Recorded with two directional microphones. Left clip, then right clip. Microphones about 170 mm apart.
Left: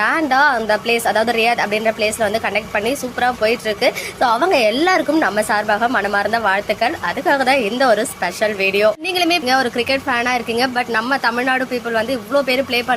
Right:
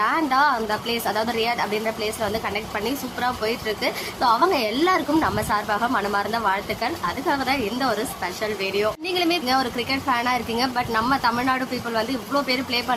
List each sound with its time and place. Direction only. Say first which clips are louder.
0.0 s a woman's voice: left 5 dB; 20° left (ahead or behind)